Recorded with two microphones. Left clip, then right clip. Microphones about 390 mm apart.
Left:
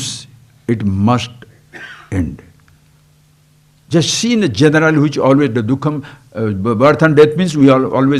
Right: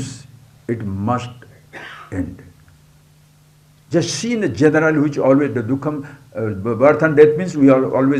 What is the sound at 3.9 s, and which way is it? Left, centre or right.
Speech, left.